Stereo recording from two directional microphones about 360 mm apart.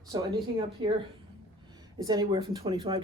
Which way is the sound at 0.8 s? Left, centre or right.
Centre.